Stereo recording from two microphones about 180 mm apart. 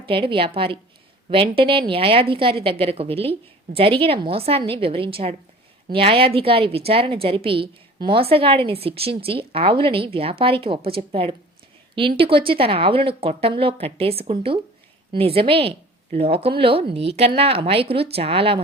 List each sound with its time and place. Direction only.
0.0 s a woman's voice: 30° right (ahead or behind)